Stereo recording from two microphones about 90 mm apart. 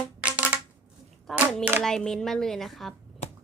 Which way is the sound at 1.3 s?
Centre (ahead or behind).